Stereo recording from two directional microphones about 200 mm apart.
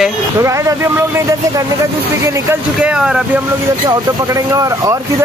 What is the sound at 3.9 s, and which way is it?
Speech, 15° right (ahead or behind).